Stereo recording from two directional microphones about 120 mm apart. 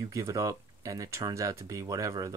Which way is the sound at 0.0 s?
25° right (ahead or behind).